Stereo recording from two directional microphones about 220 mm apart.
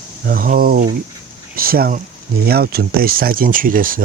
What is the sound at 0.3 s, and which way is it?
Speech, 40° right (ahead or behind).